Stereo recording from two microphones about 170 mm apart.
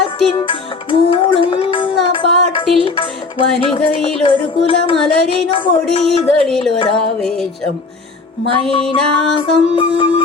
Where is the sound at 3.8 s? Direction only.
30° left (ahead or behind).